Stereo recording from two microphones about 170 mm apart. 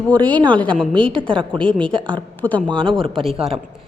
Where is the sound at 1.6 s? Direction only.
5° left (ahead or behind).